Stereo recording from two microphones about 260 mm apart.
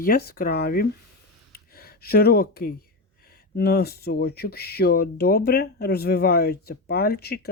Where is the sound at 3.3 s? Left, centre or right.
Left.